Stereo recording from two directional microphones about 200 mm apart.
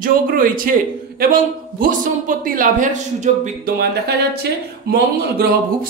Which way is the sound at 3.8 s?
55° right (ahead or behind).